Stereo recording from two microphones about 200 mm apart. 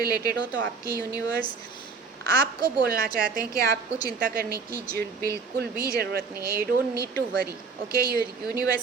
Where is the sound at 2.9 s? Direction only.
45° right (ahead or behind).